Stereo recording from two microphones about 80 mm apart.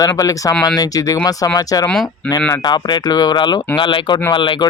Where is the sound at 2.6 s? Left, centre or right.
Left.